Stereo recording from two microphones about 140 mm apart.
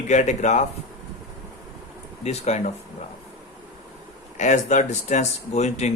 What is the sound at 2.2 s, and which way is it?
Speech, 50° left (ahead or behind).